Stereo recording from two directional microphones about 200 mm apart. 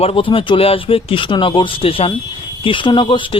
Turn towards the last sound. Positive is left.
turn(degrees=25)  # may be behind; listen again after turning